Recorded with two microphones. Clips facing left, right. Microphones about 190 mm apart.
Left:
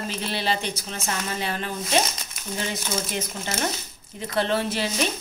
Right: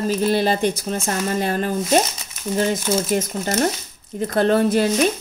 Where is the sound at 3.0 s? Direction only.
45° right (ahead or behind).